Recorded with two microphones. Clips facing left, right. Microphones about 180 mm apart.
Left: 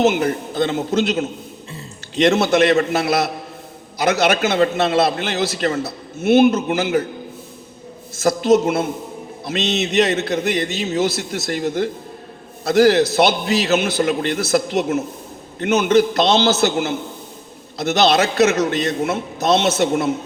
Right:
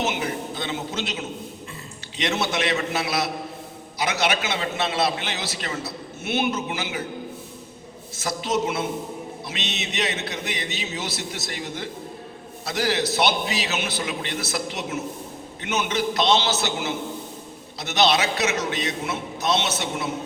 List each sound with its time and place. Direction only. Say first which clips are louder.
0.0 s a man's voice: left 9 dB; 50° left (ahead or behind)
8.2 s a man's voice: left 10 dB; 50° left (ahead or behind)